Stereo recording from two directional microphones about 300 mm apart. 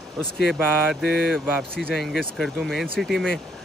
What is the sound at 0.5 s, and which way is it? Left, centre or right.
Speech, centre.